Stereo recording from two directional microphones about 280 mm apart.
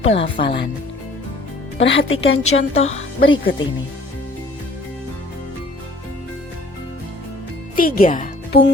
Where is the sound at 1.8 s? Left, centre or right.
Left.